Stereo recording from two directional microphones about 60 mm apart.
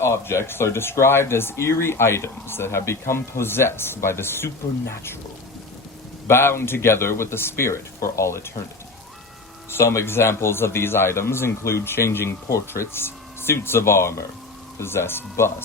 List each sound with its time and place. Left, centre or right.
0.0 s speech: left
6.2 s speech: left
9.6 s speech: left